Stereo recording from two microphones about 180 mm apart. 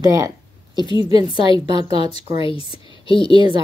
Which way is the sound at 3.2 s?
25° right (ahead or behind).